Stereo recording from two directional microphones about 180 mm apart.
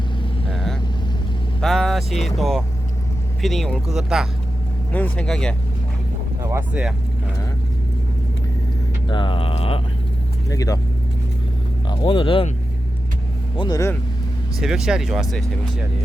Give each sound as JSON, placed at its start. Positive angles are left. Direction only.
{"t": 0.5, "sound": "vehicle", "side_deg": 0}
{"t": 1.6, "sound": "speech", "side_deg": 0}
{"t": 6.4, "sound": "speech", "side_deg": -15}
{"t": 9.0, "sound": "a sound", "side_deg": 25}
{"t": 10.5, "sound": "speech", "side_deg": 20}
{"t": 11.9, "sound": "speech", "side_deg": 30}
{"t": 13.6, "sound": "speech", "side_deg": 20}
{"t": 14.6, "sound": "speech", "side_deg": -5}